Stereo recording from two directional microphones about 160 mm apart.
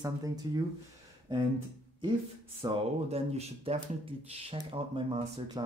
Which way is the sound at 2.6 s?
40° right (ahead or behind).